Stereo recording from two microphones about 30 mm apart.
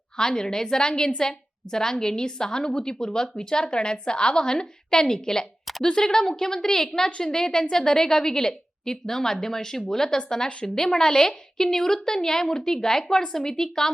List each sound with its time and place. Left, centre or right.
0.2 s a woman's voice: left